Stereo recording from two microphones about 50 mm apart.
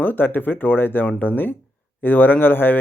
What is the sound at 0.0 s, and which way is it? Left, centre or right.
Speech, left.